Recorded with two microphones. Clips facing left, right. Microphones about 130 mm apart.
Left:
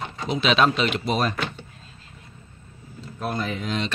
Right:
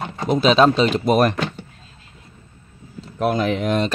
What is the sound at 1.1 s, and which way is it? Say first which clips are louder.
Speech: right 10 dB; 60° right (ahead or behind).